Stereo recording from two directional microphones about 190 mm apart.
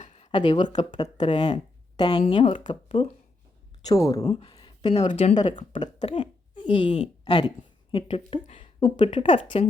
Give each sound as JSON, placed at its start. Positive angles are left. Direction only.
{"t": 0.0, "sound": "a sound", "side_deg": 35}
{"t": 0.9, "sound": "speech", "side_deg": 20}
{"t": 3.8, "sound": "speech", "side_deg": 15}
{"t": 4.3, "sound": "speech", "side_deg": 30}
{"t": 5.0, "sound": "speech", "side_deg": 35}
{"t": 5.7, "sound": "speech", "side_deg": 25}